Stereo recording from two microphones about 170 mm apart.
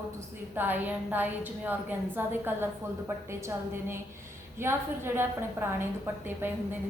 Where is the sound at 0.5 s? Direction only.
10° right (ahead or behind).